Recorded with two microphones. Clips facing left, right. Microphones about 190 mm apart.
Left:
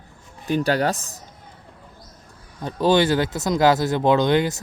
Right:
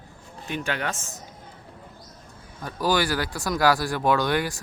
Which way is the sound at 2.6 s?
25° left (ahead or behind).